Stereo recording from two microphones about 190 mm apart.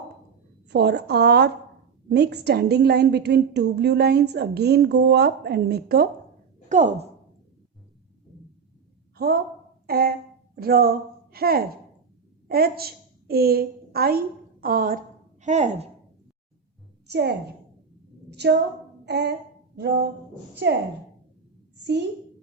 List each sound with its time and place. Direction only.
0.7 s a woman's voice: 60° right (ahead or behind)
6.7 s a woman's voice: 40° right (ahead or behind)
9.1 s a woman's voice: 55° right (ahead or behind); by 15.9 s 35° right (ahead or behind)
17.1 s a woman's voice: 65° right (ahead or behind)
18.3 s a sound: 65° right (ahead or behind)
20.6 s a woman's voice: 60° right (ahead or behind)